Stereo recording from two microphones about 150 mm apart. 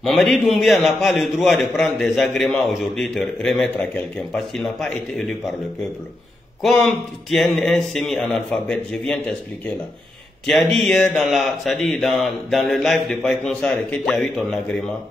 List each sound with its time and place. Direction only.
0.0 s a man's voice: centre (ahead or behind)
6.6 s a man's voice: centre (ahead or behind)
10.4 s a man's voice: centre (ahead or behind)